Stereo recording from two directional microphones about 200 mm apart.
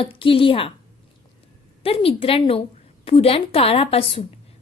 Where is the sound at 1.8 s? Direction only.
30° left (ahead or behind).